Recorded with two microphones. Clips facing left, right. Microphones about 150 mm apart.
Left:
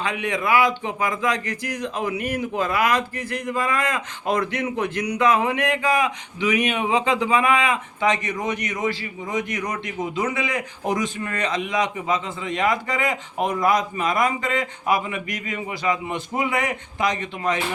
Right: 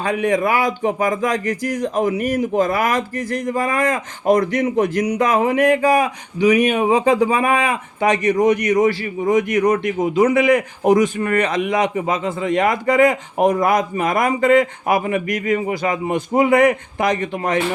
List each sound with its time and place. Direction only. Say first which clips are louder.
0.0 s speech: right 7 dB; 45° right (ahead or behind)
9.6 s speech: right 11 dB; 50° right (ahead or behind)